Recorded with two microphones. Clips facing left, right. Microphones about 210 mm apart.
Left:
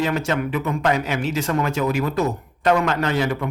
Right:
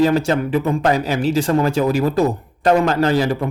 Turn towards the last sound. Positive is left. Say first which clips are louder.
# right 5 dB
turn(degrees=-35)  # may be behind; listen again after turning